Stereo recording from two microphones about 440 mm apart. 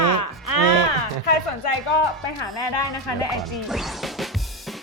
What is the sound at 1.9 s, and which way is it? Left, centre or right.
Speech, left.